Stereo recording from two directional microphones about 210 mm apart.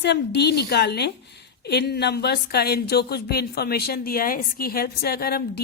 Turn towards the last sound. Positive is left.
turn(degrees=45)  # may be behind; listen again after turning